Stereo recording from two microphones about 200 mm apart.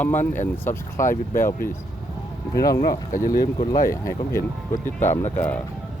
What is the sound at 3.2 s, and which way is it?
Speech, 45° left (ahead or behind).